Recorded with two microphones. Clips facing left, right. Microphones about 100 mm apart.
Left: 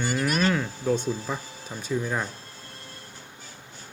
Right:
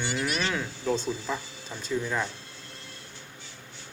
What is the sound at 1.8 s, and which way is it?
Speech, 10° left (ahead or behind).